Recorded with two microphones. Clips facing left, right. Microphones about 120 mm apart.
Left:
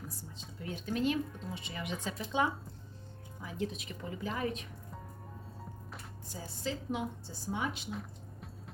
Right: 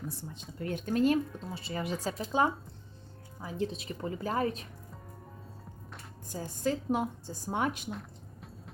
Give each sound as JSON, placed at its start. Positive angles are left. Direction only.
{"t": 0.1, "sound": "a sound", "side_deg": -60}
{"t": 0.6, "sound": "speech", "side_deg": -55}
{"t": 6.2, "sound": "a woman's voice", "side_deg": -50}
{"t": 7.9, "sound": "music", "side_deg": 0}